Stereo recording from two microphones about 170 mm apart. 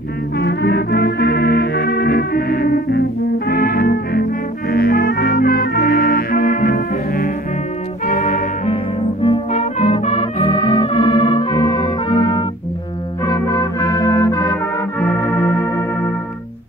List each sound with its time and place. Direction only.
0.4 s music: 70° left (ahead or behind); by 8.5 s 50° left (ahead or behind)
9.2 s music: 35° left (ahead or behind)
13.2 s brass instrument: 20° left (ahead or behind)